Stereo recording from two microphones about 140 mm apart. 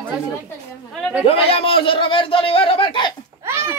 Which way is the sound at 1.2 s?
40° left (ahead or behind).